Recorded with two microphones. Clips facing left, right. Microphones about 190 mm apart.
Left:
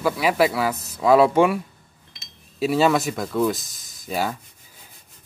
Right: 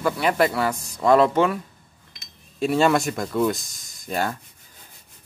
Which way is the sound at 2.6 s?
5° left (ahead or behind).